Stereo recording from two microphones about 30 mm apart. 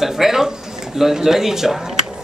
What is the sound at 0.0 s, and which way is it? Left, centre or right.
Speech, centre.